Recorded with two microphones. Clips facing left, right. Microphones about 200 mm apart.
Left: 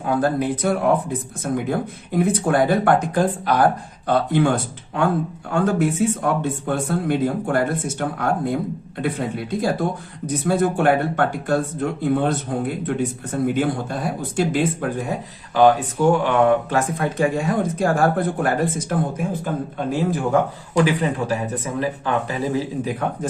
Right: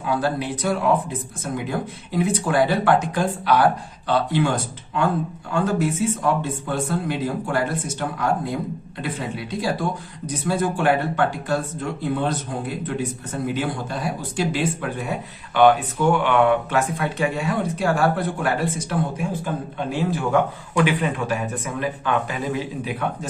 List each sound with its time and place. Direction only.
0.0 s a man's voice: 50° left (ahead or behind)